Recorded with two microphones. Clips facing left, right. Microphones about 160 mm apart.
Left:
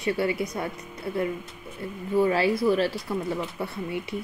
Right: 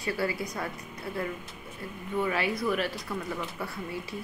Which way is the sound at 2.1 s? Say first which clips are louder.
Left 7 dB; 30° left (ahead or behind).